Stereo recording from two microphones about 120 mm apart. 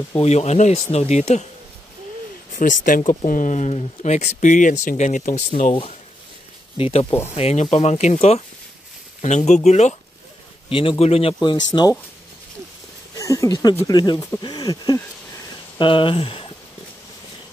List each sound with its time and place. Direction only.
0.2 s speech: 65° left (ahead or behind)
2.5 s speech: 90° left
6.8 s speech: 55° left (ahead or behind)
7.1 s speech: 20° left (ahead or behind)
7.3 s speech: 60° left (ahead or behind)
8.2 s speech: 55° left (ahead or behind)
9.2 s speech: 75° left (ahead or behind)
10.7 s speech: 45° left (ahead or behind)
11.4 s speech: 40° left (ahead or behind)
13.2 s speech: 25° left (ahead or behind)
15.8 s speech: 45° left (ahead or behind)